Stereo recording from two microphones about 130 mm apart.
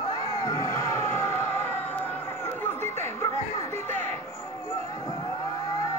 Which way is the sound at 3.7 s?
15° left (ahead or behind).